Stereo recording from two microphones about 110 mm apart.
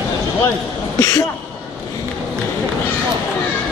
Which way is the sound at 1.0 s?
30° left (ahead or behind).